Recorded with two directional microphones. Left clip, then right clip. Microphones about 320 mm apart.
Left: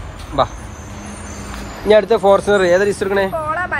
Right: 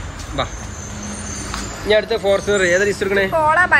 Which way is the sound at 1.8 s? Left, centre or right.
Centre.